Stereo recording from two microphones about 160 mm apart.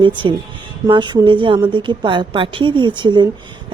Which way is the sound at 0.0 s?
30° right (ahead or behind).